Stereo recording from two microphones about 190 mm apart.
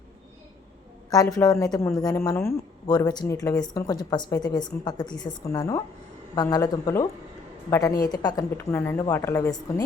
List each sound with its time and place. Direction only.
1.4 s a woman's voice: 15° left (ahead or behind)